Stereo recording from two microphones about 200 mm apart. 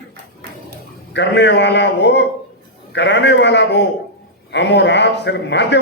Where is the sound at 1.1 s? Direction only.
60° left (ahead or behind).